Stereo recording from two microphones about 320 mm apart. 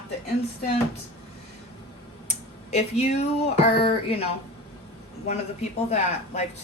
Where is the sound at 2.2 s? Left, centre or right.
Left.